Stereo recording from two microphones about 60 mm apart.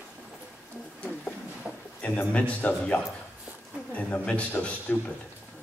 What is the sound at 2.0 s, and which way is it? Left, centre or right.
A man's voice, left.